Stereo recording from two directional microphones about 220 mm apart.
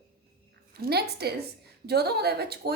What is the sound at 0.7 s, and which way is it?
A woman's voice, 45° right (ahead or behind).